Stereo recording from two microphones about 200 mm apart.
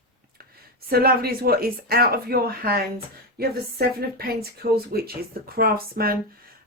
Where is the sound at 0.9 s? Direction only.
50° right (ahead or behind).